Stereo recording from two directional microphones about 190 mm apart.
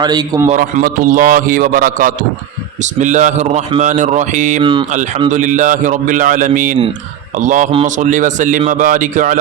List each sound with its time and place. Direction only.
0.0 s a man's voice: 20° right (ahead or behind)
0.5 s a man's voice: 45° right (ahead or behind)
4.6 s a man's voice: 25° right (ahead or behind)
4.9 s speech: 40° right (ahead or behind)